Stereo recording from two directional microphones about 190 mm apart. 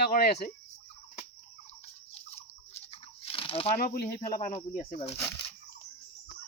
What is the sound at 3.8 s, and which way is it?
Speech, 45° left (ahead or behind).